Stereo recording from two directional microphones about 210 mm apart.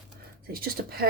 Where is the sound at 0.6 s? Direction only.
45° right (ahead or behind).